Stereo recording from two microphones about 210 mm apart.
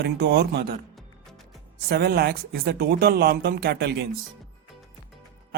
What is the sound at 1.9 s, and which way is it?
Speech, 50° right (ahead or behind).